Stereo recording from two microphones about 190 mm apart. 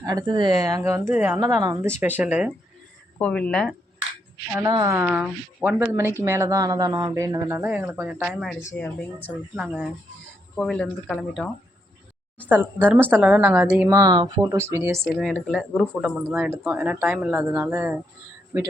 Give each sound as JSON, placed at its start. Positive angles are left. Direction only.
{"t": 0.0, "sound": "speech", "side_deg": -20}
{"t": 3.2, "sound": "speech", "side_deg": 5}
{"t": 4.5, "sound": "speech", "side_deg": -20}
{"t": 5.0, "sound": "speech", "side_deg": -5}
{"t": 8.8, "sound": "speech", "side_deg": 10}
{"t": 13.8, "sound": "speech", "side_deg": -20}
{"t": 15.0, "sound": "speech", "side_deg": 5}
{"t": 15.8, "sound": "speech", "side_deg": -5}